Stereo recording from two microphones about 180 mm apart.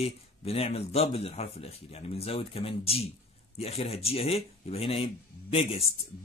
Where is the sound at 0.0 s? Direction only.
35° left (ahead or behind).